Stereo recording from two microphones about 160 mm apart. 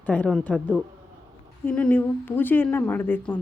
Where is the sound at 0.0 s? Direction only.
10° left (ahead or behind).